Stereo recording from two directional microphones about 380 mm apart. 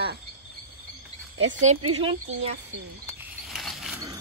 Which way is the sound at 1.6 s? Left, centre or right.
Centre.